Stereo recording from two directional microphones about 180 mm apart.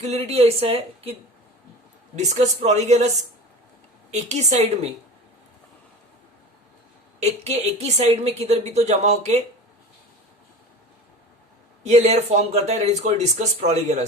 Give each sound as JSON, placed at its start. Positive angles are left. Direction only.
{"t": 0.0, "sound": "speech", "side_deg": -35}
{"t": 2.1, "sound": "speech", "side_deg": -40}
{"t": 4.1, "sound": "speech", "side_deg": -40}
{"t": 7.3, "sound": "speech", "side_deg": -35}
{"t": 11.8, "sound": "speech", "side_deg": -40}